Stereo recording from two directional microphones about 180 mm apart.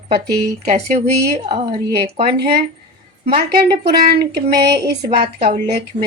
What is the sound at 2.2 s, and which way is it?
Speech, 60° right (ahead or behind).